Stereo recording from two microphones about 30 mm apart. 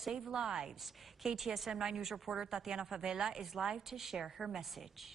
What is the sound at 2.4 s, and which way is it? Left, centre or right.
A woman's voice, centre.